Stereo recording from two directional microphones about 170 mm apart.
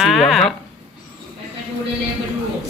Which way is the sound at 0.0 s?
Centre (ahead or behind).